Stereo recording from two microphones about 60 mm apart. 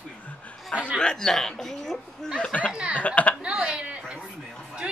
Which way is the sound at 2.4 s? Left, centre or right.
Left.